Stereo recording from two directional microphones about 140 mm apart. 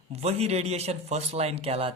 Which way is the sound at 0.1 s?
50° right (ahead or behind).